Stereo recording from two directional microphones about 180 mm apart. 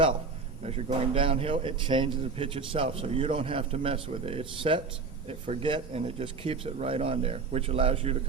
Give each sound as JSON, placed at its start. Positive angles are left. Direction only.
{"t": 0.6, "sound": "a man's voice", "side_deg": -35}